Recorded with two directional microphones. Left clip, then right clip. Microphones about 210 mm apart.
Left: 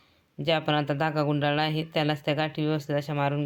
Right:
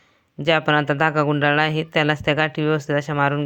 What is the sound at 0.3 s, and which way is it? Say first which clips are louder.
Speech: right 8 dB; 20° right (ahead or behind).